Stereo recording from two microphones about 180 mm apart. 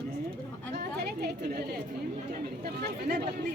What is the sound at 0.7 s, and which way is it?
Speech, 65° right (ahead or behind).